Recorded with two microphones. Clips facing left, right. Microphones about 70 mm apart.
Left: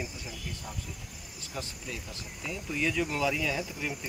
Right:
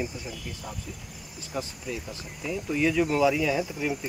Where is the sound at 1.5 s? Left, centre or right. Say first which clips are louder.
Right 6 dB; centre.